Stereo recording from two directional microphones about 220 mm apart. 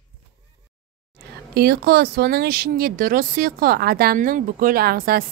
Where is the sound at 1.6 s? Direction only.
45° right (ahead or behind).